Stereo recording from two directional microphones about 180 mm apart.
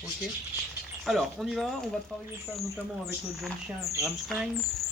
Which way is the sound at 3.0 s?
Centre (ahead or behind).